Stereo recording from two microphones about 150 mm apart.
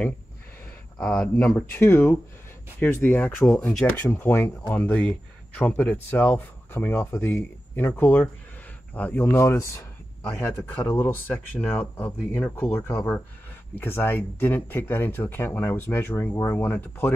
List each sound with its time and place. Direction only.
0.9 s speech: 5° left (ahead or behind)
1.5 s speech: 20° left (ahead or behind)